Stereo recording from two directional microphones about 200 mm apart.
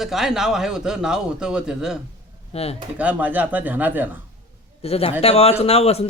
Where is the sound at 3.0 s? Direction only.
5° right (ahead or behind).